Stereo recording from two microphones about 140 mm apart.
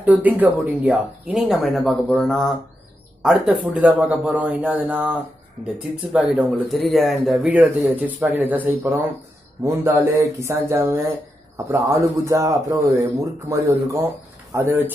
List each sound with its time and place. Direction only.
0.0 s speech: 10° right (ahead or behind)
6.7 s speech: centre (ahead or behind)
9.6 s speech: 15° right (ahead or behind)